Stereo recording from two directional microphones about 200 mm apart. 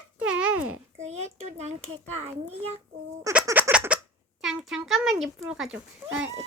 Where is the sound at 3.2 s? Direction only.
10° right (ahead or behind).